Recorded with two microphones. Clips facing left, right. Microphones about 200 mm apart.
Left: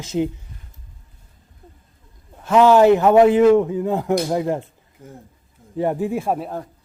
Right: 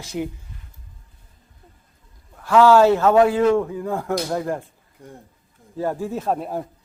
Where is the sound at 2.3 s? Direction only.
20° left (ahead or behind).